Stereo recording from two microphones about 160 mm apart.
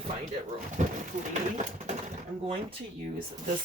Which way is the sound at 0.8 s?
50° right (ahead or behind).